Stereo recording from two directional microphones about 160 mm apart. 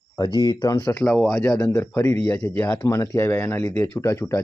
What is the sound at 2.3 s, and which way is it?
Speech, 5° left (ahead or behind).